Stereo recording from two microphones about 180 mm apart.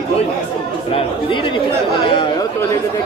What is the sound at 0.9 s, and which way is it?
Speech, 30° left (ahead or behind).